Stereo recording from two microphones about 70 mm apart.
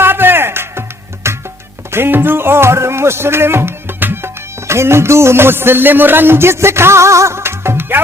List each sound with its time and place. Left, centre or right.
0.0 s music: right